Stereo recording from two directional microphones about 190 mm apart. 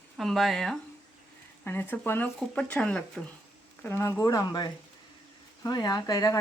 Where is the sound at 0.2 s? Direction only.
Centre (ahead or behind).